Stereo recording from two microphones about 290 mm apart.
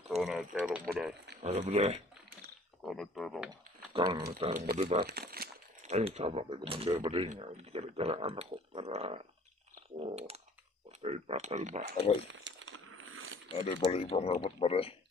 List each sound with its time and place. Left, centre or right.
0.1 s speech: centre
1.4 s speech: right
2.8 s speech: centre
3.9 s speech: centre
5.0 s speech: right
12.3 s a sound: right
13.7 s speech: left